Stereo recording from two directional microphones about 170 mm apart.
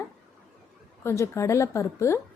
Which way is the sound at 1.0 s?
15° left (ahead or behind).